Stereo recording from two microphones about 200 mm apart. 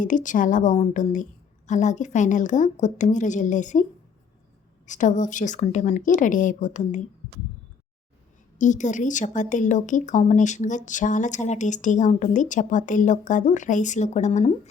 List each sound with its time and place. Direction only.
0.0 s a woman's voice: 40° left (ahead or behind)
4.9 s a woman's voice: 40° left (ahead or behind)
8.5 s a woman's voice: 40° left (ahead or behind)